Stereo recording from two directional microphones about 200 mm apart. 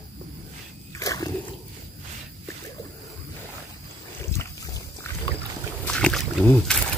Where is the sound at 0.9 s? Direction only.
15° left (ahead or behind).